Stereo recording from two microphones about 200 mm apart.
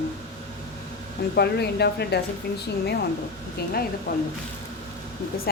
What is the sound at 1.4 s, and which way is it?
Speech, 55° left (ahead or behind).